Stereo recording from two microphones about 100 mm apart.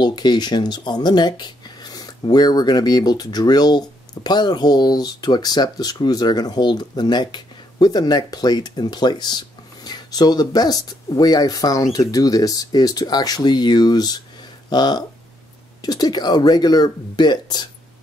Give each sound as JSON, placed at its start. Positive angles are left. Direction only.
{"t": 0.0, "sound": "speech", "side_deg": 45}